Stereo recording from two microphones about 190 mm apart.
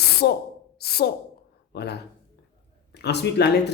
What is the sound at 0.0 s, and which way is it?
Spray, 55° left (ahead or behind).